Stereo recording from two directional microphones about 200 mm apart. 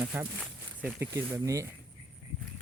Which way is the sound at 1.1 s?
15° right (ahead or behind).